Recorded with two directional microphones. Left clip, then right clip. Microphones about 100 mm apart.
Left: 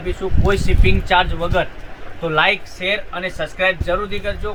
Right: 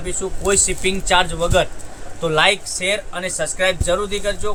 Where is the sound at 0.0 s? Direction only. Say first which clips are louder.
Left 1 dB; 45° right (ahead or behind).